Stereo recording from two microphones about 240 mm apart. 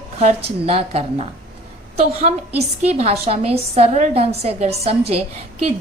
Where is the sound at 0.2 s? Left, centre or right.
Right.